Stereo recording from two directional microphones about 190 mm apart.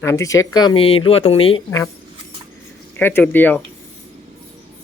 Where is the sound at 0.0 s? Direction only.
15° left (ahead or behind).